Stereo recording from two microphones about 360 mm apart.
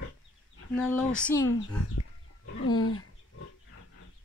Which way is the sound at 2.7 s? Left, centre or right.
Left.